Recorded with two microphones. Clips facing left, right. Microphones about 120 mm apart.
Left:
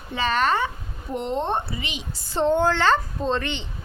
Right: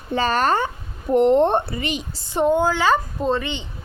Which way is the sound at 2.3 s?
10° right (ahead or behind).